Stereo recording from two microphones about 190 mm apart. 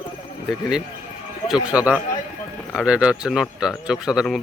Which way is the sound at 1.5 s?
5° right (ahead or behind).